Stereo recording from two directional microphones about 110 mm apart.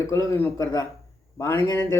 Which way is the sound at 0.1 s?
30° left (ahead or behind).